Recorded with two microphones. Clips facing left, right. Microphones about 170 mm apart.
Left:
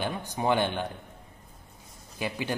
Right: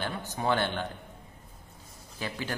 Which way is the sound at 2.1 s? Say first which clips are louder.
Left 3 dB; 15° left (ahead or behind).